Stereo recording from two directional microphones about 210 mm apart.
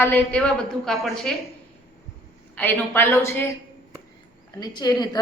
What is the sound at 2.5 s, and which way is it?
Speech, 10° left (ahead or behind).